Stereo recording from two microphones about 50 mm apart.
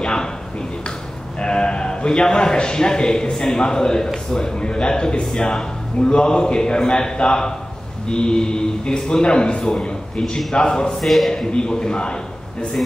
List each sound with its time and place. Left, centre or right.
0.0 s a sound: centre
1.4 s a man's voice: centre
11.0 s speech: centre
11.5 s a man's voice: centre